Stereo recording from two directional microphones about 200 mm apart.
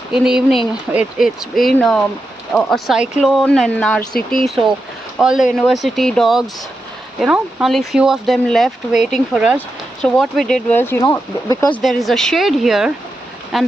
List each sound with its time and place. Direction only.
0.1 s speech: 5° right (ahead or behind); by 11.7 s 15° left (ahead or behind)
11.7 s speech: centre (ahead or behind)